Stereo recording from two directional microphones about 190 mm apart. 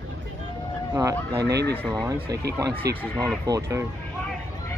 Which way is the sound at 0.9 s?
15° right (ahead or behind).